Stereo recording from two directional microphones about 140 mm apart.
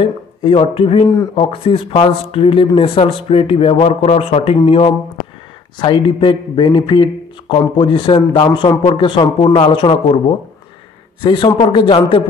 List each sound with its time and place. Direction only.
0.0 s speech: 40° left (ahead or behind)
1.0 s speech: 30° left (ahead or behind)
1.3 s a man's voice: 40° left (ahead or behind)